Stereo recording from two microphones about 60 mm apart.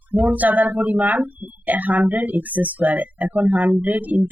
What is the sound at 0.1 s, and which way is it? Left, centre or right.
Speech, right.